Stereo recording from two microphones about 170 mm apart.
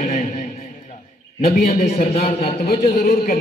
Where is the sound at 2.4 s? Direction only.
60° left (ahead or behind).